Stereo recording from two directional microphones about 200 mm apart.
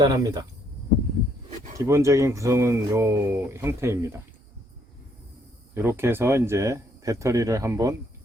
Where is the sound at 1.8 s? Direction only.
15° right (ahead or behind).